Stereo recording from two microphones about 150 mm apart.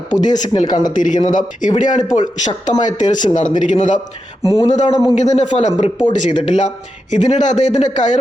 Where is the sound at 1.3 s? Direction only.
60° left (ahead or behind).